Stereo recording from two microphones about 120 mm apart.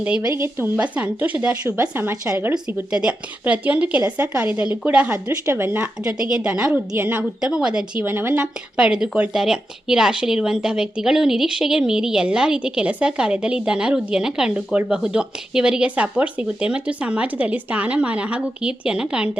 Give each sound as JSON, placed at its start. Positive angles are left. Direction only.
{"t": 0.2, "sound": "a woman's voice", "side_deg": -20}
{"t": 5.1, "sound": "a woman's voice", "side_deg": -20}